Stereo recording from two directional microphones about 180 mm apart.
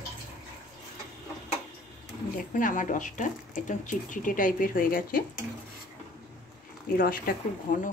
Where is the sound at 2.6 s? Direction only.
45° left (ahead or behind).